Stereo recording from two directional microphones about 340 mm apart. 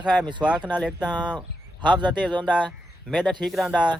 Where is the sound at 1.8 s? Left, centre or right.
Centre.